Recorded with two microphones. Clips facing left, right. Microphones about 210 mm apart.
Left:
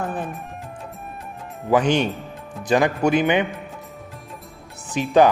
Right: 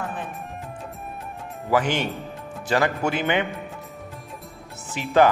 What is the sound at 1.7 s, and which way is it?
A man's voice, 20° left (ahead or behind).